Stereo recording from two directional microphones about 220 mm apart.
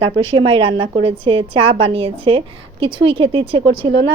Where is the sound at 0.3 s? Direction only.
25° right (ahead or behind).